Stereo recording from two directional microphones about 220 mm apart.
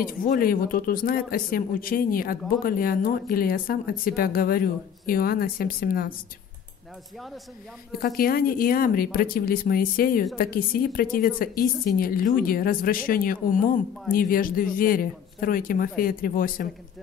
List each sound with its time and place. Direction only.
0.0 s a man's voice: 40° left (ahead or behind)
8.0 s a man's voice: 40° left (ahead or behind)